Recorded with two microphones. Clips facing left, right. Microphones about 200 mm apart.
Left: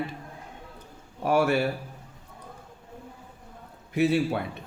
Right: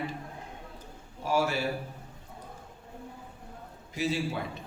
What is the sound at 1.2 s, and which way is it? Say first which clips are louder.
Speech: left 5 dB; 60° left (ahead or behind).